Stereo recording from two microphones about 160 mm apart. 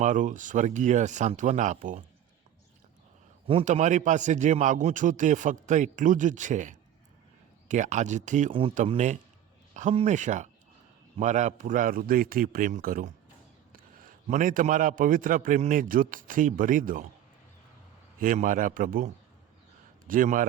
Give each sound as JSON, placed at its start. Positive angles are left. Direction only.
{"t": 0.0, "sound": "a man's voice", "side_deg": -50}
{"t": 3.6, "sound": "a man's voice", "side_deg": -50}
{"t": 18.2, "sound": "a man's voice", "side_deg": -55}